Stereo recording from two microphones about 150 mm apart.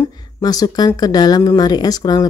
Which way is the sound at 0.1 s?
25° left (ahead or behind).